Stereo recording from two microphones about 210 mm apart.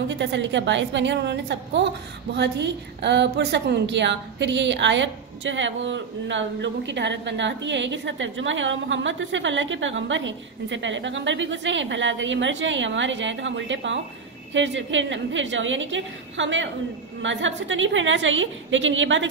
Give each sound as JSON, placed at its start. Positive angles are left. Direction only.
{"t": 0.1, "sound": "a woman's voice", "side_deg": -60}